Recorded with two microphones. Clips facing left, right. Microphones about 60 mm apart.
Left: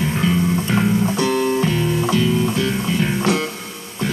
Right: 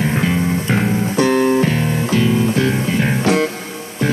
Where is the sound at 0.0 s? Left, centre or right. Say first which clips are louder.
Right 1 dB; right.